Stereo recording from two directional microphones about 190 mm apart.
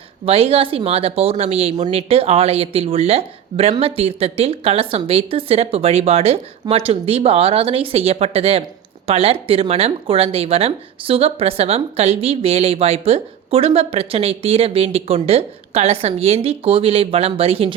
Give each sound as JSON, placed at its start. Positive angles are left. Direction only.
{"t": 0.3, "sound": "speech", "side_deg": -30}